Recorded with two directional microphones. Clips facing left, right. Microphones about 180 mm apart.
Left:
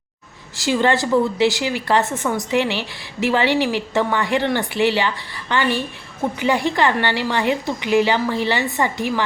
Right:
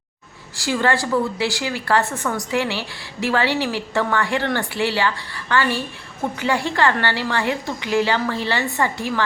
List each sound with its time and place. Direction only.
0.6 s a woman's voice: 20° left (ahead or behind)